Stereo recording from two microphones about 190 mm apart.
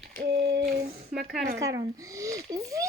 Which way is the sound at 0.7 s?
50° right (ahead or behind).